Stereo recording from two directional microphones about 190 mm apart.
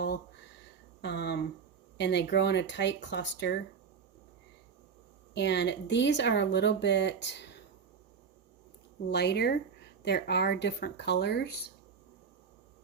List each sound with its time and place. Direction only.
1.0 s speech: 60° left (ahead or behind)
5.3 s speech: 65° left (ahead or behind)
9.0 s speech: 60° left (ahead or behind)